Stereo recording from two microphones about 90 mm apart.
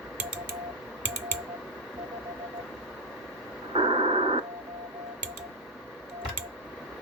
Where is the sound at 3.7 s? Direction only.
90° right.